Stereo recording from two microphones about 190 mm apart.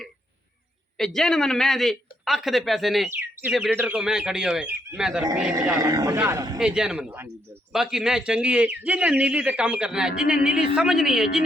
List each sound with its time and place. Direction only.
0.9 s a man's voice: centre (ahead or behind)
5.8 s a man's voice: 20° right (ahead or behind)
6.6 s a man's voice: 5° right (ahead or behind)